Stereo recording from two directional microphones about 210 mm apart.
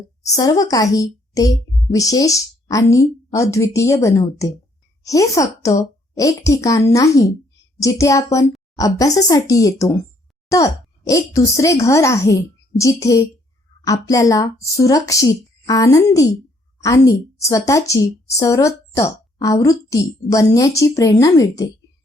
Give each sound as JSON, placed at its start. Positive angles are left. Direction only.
{"t": 0.2, "sound": "a woman's voice", "side_deg": 15}